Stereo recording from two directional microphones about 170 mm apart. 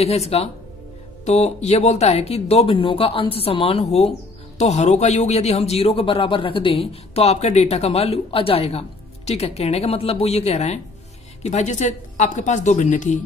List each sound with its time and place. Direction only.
0.0 s a woman's voice: 35° left (ahead or behind)